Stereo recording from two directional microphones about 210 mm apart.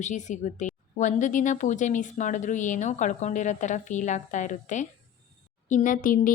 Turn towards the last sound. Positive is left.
turn(degrees=40)  # may be behind; listen again after turning